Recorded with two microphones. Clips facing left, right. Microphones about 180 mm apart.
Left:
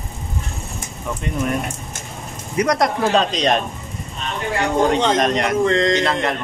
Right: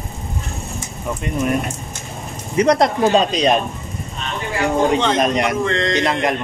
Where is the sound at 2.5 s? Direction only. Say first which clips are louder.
Right 4 dB; 25° right (ahead or behind).